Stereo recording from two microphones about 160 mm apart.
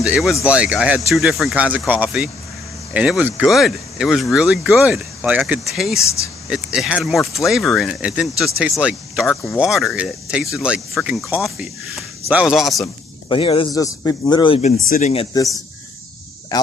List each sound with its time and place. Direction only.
0.0 s speech: 5° right (ahead or behind)
13.3 s speech: 35° left (ahead or behind)
13.7 s speech: 20° left (ahead or behind)
14.6 s speech: 50° left (ahead or behind)
16.5 s speech: 25° left (ahead or behind)